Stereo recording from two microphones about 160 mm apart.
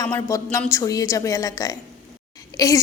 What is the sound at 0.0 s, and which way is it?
A woman's voice, 20° left (ahead or behind).